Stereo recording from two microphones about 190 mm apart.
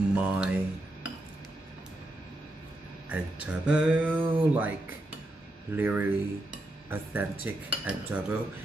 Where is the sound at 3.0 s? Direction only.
5° right (ahead or behind).